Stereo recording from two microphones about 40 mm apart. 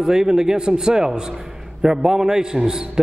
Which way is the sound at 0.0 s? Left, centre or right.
Centre.